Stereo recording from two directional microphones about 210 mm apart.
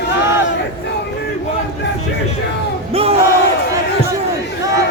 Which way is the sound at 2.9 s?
30° right (ahead or behind).